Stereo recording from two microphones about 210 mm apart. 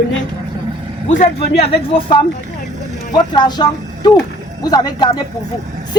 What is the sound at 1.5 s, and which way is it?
Speech, 25° left (ahead or behind).